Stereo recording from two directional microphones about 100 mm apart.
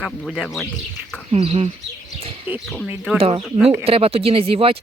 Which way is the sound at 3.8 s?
75° right (ahead or behind).